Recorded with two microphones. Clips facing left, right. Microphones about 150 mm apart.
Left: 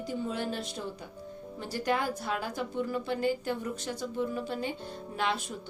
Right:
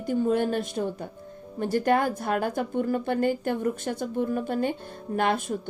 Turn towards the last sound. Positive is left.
turn(degrees=-50)  # may be behind; listen again after turning